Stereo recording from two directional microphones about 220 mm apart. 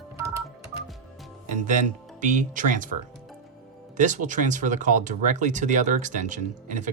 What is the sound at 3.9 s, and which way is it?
Speech, 35° right (ahead or behind).